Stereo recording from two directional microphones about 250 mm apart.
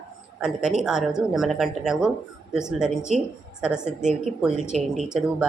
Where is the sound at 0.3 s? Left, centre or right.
Centre.